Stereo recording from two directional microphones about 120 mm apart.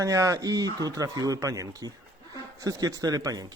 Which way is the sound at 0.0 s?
25° right (ahead or behind).